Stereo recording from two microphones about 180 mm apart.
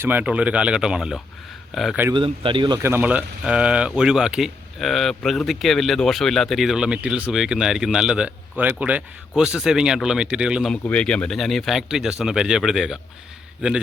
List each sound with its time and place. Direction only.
0.0 s speech: 10° right (ahead or behind)
2.1 s speech: 30° right (ahead or behind)
2.8 s speech: 10° right (ahead or behind)